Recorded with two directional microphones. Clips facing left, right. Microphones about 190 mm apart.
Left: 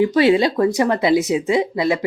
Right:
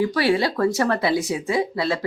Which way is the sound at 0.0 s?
20° left (ahead or behind).